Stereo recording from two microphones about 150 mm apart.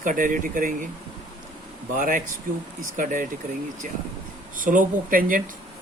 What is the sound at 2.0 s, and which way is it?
Speech, 65° right (ahead or behind).